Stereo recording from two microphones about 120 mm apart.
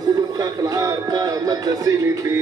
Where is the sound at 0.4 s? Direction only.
30° right (ahead or behind).